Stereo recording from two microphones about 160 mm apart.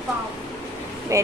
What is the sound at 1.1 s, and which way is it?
Speech, 20° right (ahead or behind).